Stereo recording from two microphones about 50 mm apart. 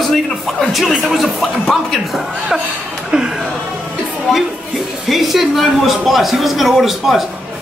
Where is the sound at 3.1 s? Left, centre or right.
Centre.